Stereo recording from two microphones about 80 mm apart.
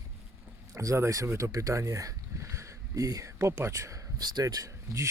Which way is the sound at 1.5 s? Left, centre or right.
Right.